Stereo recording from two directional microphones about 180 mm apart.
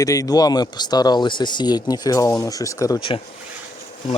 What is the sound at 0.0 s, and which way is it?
Speech, 20° left (ahead or behind).